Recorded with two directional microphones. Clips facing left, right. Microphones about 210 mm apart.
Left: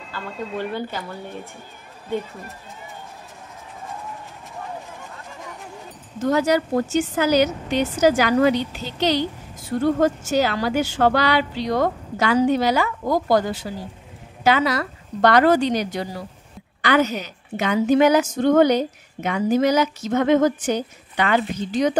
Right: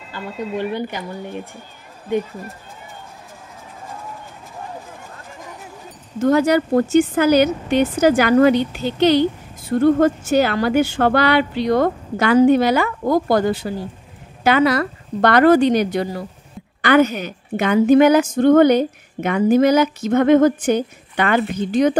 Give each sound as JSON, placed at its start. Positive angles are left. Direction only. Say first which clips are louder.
{"t": 0.1, "sound": "speech", "louder": "right 4 dB", "side_deg": -15}
{"t": 6.1, "sound": "a woman's voice", "louder": "right 4 dB", "side_deg": -55}